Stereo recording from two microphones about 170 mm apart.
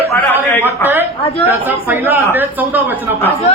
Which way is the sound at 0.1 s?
10° left (ahead or behind).